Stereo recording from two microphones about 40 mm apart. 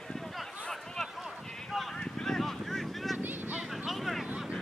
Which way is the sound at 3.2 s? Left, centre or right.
Right.